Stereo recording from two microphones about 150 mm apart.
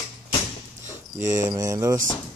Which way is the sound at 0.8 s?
55° right (ahead or behind).